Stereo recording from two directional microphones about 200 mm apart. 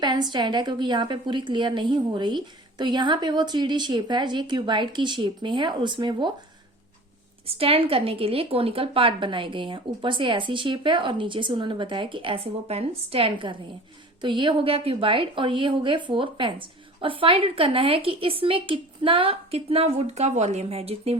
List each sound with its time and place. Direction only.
0.0 s a woman's voice: 20° right (ahead or behind)
7.4 s a woman's voice: 30° right (ahead or behind)